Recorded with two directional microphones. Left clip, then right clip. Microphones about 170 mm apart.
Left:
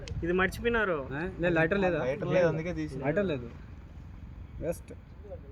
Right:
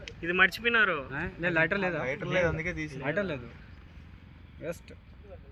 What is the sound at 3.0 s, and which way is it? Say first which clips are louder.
Speech: left 2 dB; 15° left (ahead or behind).